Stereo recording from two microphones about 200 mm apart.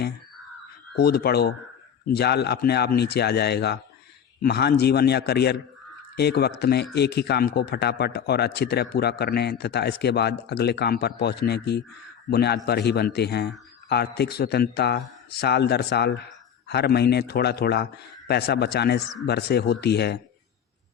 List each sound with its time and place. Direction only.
0.9 s a man's voice: 50° left (ahead or behind)